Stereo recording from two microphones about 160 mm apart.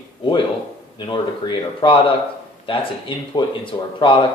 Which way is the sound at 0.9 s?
30° left (ahead or behind).